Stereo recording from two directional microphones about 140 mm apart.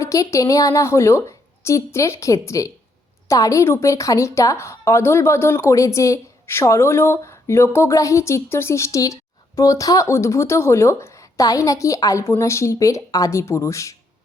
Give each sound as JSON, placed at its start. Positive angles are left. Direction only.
{"t": 0.0, "sound": "a woman's voice", "side_deg": 20}